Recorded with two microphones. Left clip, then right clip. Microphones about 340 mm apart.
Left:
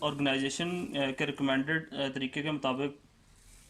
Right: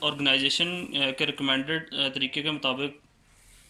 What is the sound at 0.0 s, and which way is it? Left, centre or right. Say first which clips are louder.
Speech: right 7 dB; centre.